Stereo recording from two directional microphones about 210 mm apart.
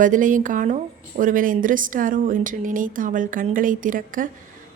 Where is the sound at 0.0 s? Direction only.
40° right (ahead or behind).